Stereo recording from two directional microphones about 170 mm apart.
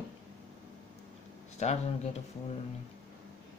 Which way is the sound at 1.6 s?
40° left (ahead or behind).